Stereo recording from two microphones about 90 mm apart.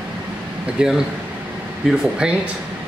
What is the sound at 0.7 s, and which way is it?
Speech, 5° right (ahead or behind).